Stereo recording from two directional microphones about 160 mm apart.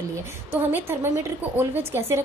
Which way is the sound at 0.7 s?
15° right (ahead or behind).